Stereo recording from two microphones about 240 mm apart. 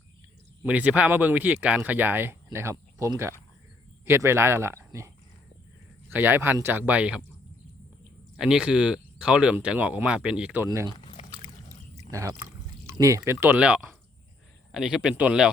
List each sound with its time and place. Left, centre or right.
0.6 s speech: centre
8.4 s speech: centre
10.9 s pour: left
12.1 s a man's voice: centre